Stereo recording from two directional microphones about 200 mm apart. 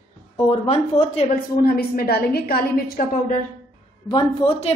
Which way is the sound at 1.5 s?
50° left (ahead or behind).